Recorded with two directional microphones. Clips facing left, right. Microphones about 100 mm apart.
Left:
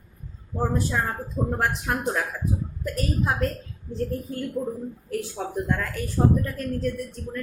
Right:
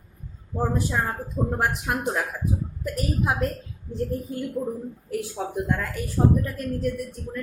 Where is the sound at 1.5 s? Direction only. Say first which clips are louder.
Even; 15° right (ahead or behind).